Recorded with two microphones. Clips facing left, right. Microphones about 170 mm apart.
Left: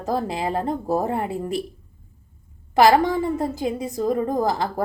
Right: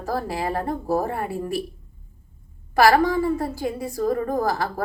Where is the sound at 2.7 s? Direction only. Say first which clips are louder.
Left 1 dB; 20° left (ahead or behind).